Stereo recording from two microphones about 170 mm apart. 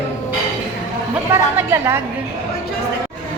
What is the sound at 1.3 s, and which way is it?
Speech, 15° right (ahead or behind).